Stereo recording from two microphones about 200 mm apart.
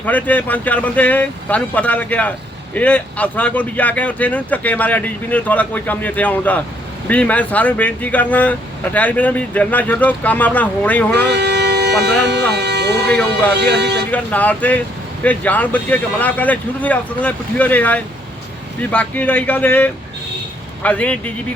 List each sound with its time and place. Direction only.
0.0 s speech: 10° left (ahead or behind)
11.2 s speech: 60° right (ahead or behind)
14.1 s speech: 5° left (ahead or behind)